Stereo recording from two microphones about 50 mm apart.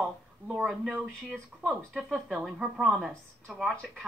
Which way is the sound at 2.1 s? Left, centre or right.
Centre.